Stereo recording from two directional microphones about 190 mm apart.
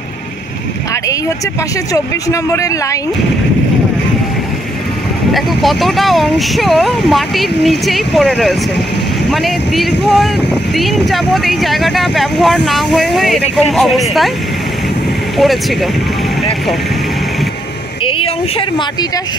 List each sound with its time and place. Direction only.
2.0 s speech: 15° left (ahead or behind)
5.3 s speech: centre (ahead or behind)
15.3 s speech: centre (ahead or behind)
18.0 s a sound: 30° left (ahead or behind)